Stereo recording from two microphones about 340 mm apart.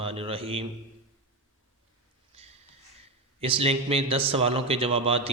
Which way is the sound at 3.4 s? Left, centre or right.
Centre.